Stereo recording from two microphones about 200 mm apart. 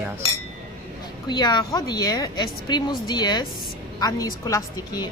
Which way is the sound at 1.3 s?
20° left (ahead or behind).